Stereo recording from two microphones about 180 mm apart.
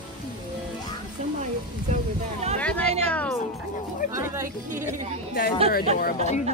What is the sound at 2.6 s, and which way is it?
Music, 5° left (ahead or behind).